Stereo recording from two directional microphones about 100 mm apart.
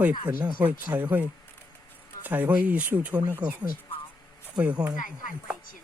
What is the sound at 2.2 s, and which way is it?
Speech, 15° right (ahead or behind).